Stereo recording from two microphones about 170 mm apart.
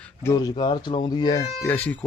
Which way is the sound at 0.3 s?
25° left (ahead or behind).